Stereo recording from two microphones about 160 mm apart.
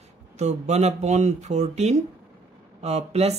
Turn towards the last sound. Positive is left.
turn(degrees=-40)  # may be behind; listen again after turning